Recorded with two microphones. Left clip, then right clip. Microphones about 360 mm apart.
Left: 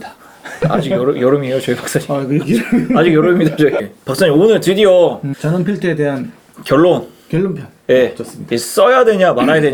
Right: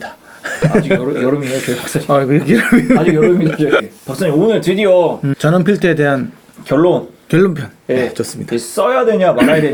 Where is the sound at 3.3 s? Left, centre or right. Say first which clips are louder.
Even; centre.